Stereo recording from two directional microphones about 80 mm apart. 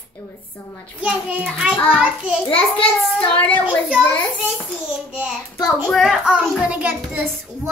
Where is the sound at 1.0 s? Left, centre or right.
Centre.